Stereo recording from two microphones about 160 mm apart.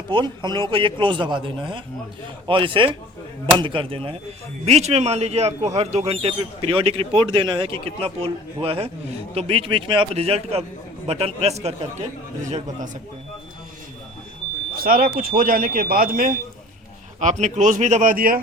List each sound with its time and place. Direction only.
0.1 s speech: 30° right (ahead or behind); by 12.5 s 45° right (ahead or behind)
14.8 s speech: 65° right (ahead or behind)
17.2 s speech: 45° right (ahead or behind)